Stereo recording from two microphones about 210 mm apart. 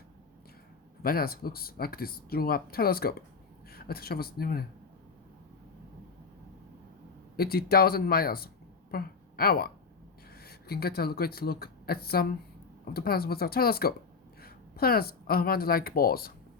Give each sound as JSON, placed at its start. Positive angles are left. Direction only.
{"t": 1.0, "sound": "speech", "side_deg": 45}
{"t": 7.3, "sound": "a woman's voice", "side_deg": 45}